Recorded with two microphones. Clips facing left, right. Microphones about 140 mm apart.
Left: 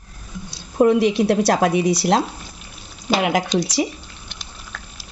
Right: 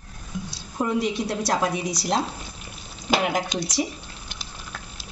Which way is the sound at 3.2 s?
85° left.